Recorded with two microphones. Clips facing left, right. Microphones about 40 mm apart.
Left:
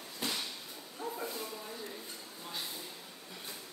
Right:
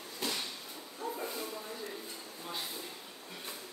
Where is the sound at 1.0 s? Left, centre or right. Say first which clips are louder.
Right 1 dB; left.